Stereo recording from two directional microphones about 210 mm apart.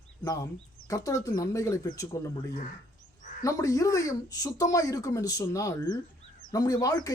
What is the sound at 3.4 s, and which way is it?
Speech, 15° left (ahead or behind).